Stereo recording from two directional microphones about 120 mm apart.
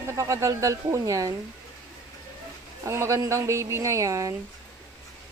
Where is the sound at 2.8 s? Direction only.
25° right (ahead or behind).